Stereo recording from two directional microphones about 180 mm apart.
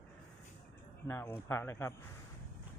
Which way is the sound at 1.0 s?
15° left (ahead or behind).